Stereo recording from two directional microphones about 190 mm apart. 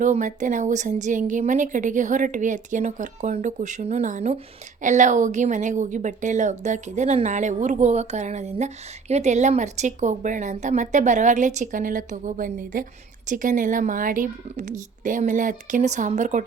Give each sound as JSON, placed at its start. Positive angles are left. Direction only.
{"t": 0.0, "sound": "a woman's voice", "side_deg": -40}